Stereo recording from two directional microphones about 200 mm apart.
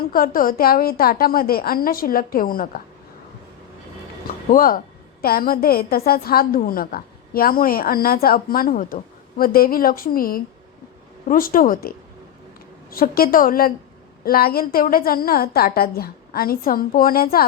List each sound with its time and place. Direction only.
0.0 s a woman's voice: 45° left (ahead or behind)
4.4 s a woman's voice: 45° left (ahead or behind)